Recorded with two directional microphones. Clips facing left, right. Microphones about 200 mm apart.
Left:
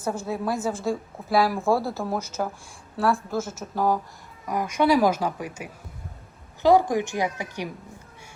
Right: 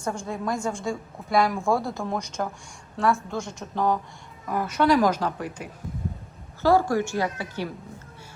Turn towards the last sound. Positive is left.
turn(degrees=15)  # may be behind; listen again after turning